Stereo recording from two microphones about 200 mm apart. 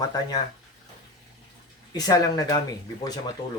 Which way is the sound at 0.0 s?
20° left (ahead or behind).